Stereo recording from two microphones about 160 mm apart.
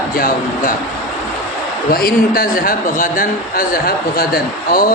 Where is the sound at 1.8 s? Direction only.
70° left (ahead or behind).